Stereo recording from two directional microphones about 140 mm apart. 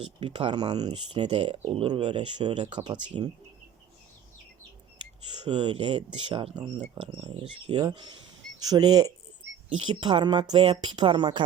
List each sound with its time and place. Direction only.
0.0 s speech: 40° right (ahead or behind)
5.4 s speech: 35° right (ahead or behind)
6.9 s speech: 30° right (ahead or behind)